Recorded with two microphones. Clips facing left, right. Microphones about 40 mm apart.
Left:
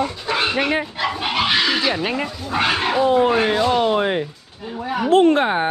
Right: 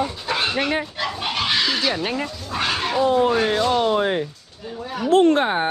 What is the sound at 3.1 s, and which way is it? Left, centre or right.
Speech, left.